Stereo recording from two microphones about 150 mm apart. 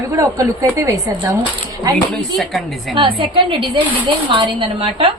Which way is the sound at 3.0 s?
35° right (ahead or behind).